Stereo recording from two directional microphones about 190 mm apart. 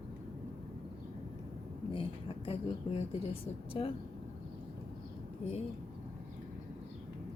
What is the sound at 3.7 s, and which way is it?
Speech, 25° left (ahead or behind).